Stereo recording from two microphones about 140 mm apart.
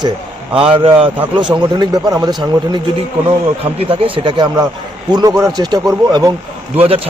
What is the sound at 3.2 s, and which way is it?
A man's voice, 40° right (ahead or behind).